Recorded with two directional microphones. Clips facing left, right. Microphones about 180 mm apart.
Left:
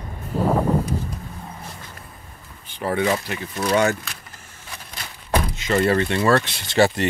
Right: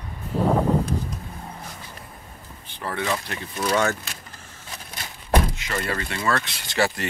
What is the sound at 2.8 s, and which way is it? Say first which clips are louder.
Speech: left 6 dB; 15° left (ahead or behind).